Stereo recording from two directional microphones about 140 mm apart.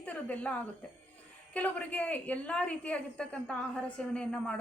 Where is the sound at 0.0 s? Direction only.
10° left (ahead or behind).